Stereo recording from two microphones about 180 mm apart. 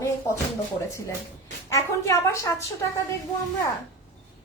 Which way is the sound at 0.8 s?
15° left (ahead or behind).